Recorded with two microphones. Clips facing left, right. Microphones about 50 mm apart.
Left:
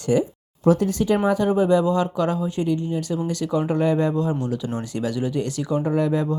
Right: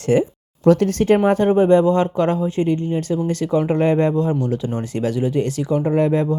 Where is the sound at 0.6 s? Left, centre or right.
Right.